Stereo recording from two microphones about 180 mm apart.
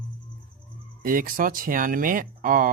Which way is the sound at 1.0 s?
50° right (ahead or behind).